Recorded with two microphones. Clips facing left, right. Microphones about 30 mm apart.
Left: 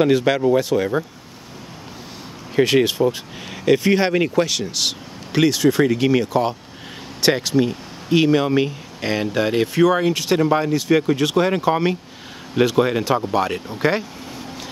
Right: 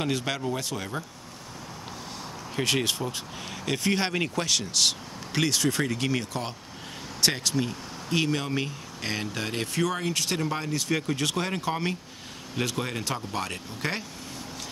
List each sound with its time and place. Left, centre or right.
0.0 s speech: centre
2.5 s speech: centre